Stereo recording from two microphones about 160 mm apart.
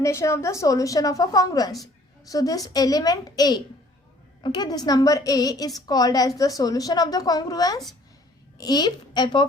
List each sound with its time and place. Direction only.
0.0 s a woman's voice: 15° left (ahead or behind)